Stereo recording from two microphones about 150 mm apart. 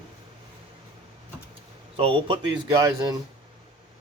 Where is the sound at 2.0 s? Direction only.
35° right (ahead or behind).